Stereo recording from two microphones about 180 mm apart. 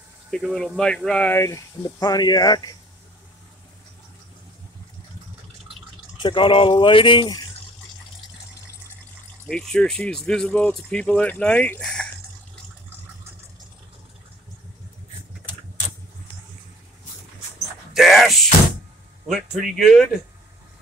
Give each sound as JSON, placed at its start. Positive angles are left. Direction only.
{"t": 0.3, "sound": "speech", "side_deg": 0}
{"t": 6.1, "sound": "speech", "side_deg": 25}
{"t": 9.5, "sound": "speech", "side_deg": 5}
{"t": 17.9, "sound": "a sound", "side_deg": 0}
{"t": 19.2, "sound": "speech", "side_deg": 0}